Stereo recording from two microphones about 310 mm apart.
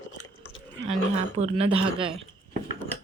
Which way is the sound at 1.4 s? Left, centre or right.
Centre.